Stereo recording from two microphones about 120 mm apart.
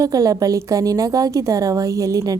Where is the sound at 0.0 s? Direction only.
30° right (ahead or behind).